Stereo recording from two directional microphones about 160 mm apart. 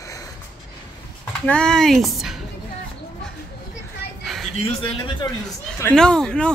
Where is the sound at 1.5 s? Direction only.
5° left (ahead or behind).